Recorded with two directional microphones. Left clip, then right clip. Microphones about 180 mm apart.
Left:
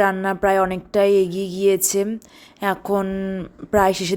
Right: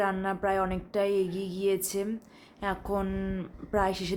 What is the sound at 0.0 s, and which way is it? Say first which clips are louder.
Speech: left 10 dB; 40° left (ahead or behind).